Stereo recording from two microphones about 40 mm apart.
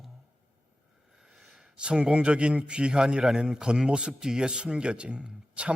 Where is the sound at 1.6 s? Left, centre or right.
Right.